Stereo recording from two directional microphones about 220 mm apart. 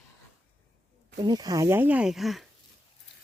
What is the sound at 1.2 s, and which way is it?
Speech, 20° right (ahead or behind).